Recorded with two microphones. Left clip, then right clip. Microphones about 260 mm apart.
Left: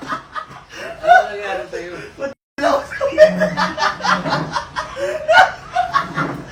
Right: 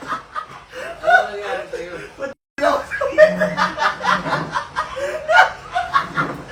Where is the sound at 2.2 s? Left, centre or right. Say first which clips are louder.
Even; left.